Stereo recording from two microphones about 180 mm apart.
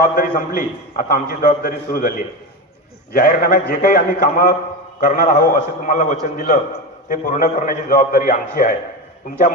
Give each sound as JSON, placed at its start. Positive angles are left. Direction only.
{"t": 0.0, "sound": "a man's voice", "side_deg": 50}